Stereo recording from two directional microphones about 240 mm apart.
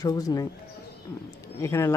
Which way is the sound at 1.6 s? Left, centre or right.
Centre.